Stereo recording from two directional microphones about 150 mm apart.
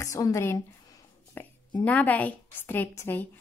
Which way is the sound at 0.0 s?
20° left (ahead or behind).